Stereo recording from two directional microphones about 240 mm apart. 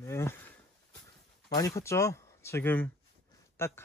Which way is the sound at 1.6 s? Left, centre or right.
Centre.